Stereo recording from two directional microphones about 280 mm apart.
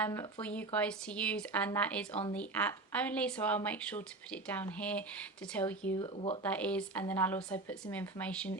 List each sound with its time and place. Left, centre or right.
0.0 s speech: centre
6.0 s speech: centre
6.4 s speech: centre